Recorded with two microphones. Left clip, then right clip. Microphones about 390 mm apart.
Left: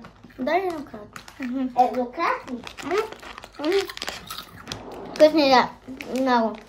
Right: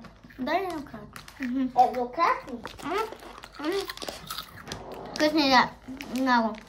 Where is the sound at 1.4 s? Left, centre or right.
Centre.